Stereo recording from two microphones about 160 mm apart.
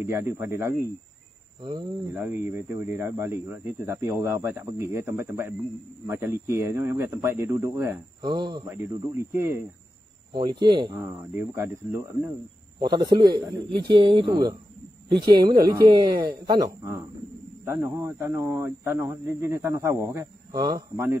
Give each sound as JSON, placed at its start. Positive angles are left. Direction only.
{"t": 0.0, "sound": "speech", "side_deg": -15}
{"t": 1.6, "sound": "speech", "side_deg": -25}
{"t": 2.1, "sound": "speech", "side_deg": -10}
{"t": 8.2, "sound": "speech", "side_deg": -25}
{"t": 8.6, "sound": "speech", "side_deg": -15}
{"t": 10.3, "sound": "speech", "side_deg": -30}
{"t": 11.3, "sound": "speech", "side_deg": -15}
{"t": 12.8, "sound": "speech", "side_deg": -25}